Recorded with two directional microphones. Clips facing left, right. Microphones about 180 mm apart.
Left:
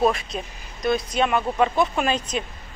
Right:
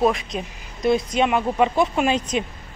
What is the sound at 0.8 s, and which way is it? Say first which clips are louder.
Speech: right 3 dB; 25° right (ahead or behind).